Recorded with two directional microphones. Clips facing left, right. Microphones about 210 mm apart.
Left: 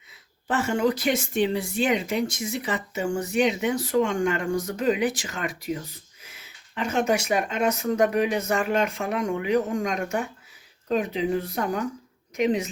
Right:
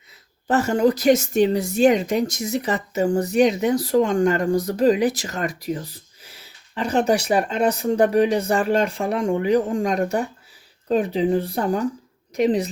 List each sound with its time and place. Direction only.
0.4 s speech: 40° right (ahead or behind)